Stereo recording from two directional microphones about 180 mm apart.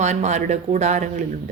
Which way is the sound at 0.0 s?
40° right (ahead or behind).